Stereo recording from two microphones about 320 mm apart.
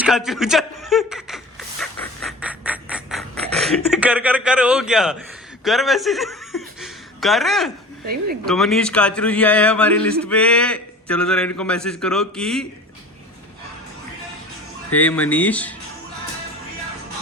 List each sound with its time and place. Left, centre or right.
0.0 s chuckle: centre
8.0 s speech: right
8.4 s a man's voice: centre
14.9 s a man's voice: centre